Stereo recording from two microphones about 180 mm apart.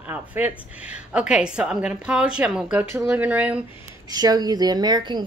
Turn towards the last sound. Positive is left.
turn(degrees=-25)  # may be behind; listen again after turning